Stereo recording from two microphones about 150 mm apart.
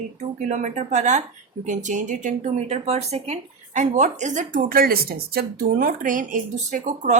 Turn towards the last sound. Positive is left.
turn(degrees=-55)  # may be behind; listen again after turning